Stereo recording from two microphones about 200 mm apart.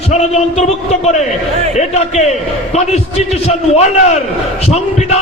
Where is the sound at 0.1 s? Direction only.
35° left (ahead or behind).